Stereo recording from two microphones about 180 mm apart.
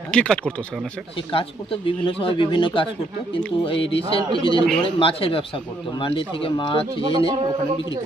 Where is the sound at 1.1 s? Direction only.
30° left (ahead or behind).